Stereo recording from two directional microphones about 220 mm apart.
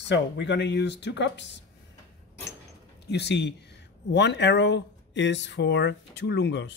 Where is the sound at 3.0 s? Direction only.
50° left (ahead or behind).